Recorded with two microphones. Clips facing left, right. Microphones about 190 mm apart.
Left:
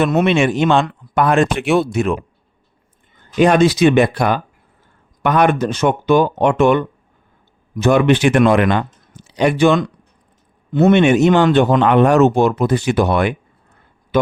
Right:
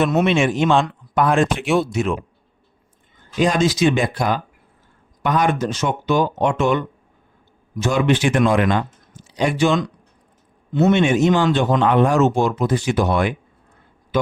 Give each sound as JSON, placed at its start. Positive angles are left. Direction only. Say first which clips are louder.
{"t": 0.0, "sound": "speech", "louder": "left 3 dB", "side_deg": 0}
{"t": 0.9, "sound": "speech", "louder": "left 2 dB", "side_deg": 65}
{"t": 3.3, "sound": "speech", "louder": "left 6 dB", "side_deg": 60}